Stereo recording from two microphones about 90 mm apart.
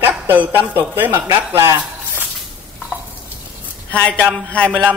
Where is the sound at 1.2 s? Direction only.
35° right (ahead or behind).